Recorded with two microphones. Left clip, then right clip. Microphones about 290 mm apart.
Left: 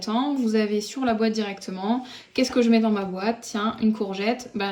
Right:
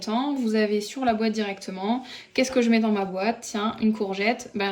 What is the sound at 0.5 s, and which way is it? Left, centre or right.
Speech, centre.